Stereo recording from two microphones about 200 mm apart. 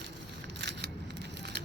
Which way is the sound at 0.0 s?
60° right (ahead or behind).